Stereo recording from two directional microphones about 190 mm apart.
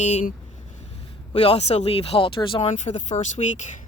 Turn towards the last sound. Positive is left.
turn(degrees=40)  # may be behind; listen again after turning